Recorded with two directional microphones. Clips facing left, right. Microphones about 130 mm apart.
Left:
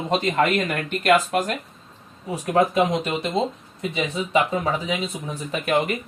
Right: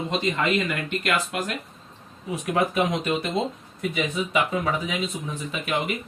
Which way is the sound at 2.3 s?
30° left (ahead or behind).